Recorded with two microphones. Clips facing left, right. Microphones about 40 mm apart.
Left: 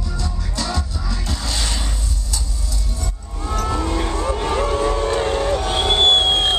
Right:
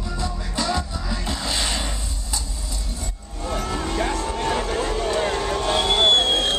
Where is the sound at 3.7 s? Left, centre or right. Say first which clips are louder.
Left 4 dB; centre.